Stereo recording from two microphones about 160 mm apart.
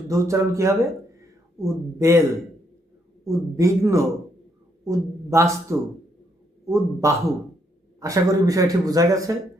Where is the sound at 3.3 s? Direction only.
20° right (ahead or behind).